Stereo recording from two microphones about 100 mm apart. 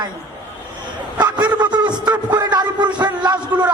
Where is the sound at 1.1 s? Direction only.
45° right (ahead or behind).